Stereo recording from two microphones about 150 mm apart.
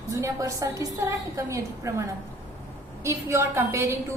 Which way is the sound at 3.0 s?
20° right (ahead or behind).